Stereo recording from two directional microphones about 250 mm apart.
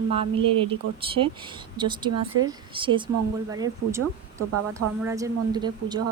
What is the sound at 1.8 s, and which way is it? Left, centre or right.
Speech, centre.